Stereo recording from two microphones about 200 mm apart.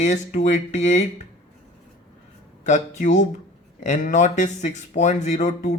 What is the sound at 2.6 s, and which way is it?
Speech, 35° left (ahead or behind).